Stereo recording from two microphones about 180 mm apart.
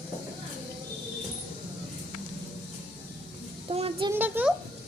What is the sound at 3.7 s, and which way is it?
Music, 30° right (ahead or behind).